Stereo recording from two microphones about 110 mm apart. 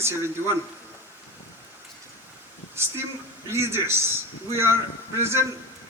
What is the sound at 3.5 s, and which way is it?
Speech, 20° right (ahead or behind).